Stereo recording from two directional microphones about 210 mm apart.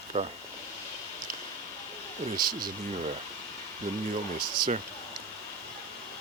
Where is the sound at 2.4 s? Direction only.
20° right (ahead or behind).